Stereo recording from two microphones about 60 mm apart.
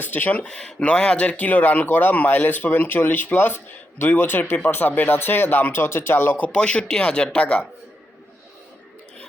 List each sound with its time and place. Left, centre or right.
0.0 s speech: left
0.4 s speech: centre; by 6.5 s left
6.5 s speech: centre